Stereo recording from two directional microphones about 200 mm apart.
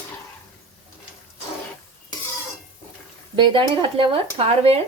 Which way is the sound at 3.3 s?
25° right (ahead or behind).